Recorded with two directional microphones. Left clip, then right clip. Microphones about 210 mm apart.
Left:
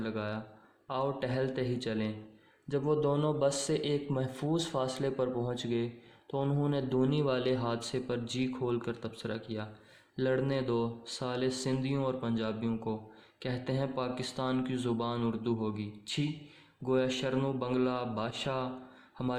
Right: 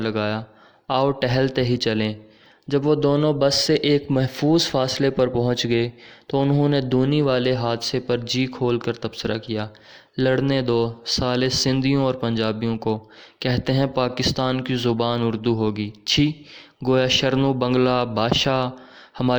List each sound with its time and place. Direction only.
0.0 s a man's voice: 40° right (ahead or behind)